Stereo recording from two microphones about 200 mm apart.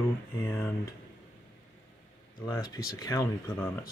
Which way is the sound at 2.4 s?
20° left (ahead or behind).